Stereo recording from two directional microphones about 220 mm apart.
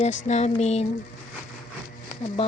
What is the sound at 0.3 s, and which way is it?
Speech, 30° left (ahead or behind).